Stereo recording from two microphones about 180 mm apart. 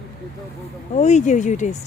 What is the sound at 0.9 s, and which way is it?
Speech, 40° left (ahead or behind).